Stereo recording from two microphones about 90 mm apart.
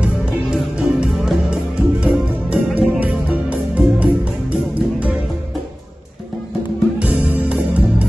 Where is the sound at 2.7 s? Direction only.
15° right (ahead or behind).